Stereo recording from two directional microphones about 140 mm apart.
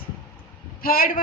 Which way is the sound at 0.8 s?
90° left.